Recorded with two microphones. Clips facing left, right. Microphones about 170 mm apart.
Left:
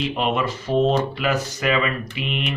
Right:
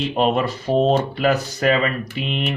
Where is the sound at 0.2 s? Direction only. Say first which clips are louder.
Right 7 dB; 40° right (ahead or behind).